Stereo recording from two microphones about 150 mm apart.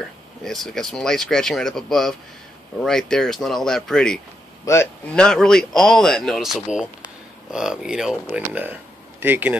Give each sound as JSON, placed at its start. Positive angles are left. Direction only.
{"t": 0.0, "sound": "speech", "side_deg": 5}
{"t": 4.7, "sound": "speech", "side_deg": 20}
{"t": 5.0, "sound": "speech", "side_deg": 5}